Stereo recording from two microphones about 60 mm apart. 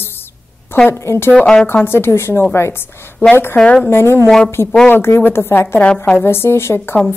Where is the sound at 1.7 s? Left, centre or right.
Left.